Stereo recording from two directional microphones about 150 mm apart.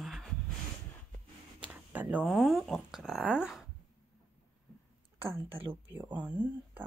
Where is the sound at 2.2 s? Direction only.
5° right (ahead or behind).